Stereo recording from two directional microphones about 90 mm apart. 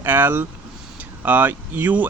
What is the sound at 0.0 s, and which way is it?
Speech, 20° right (ahead or behind).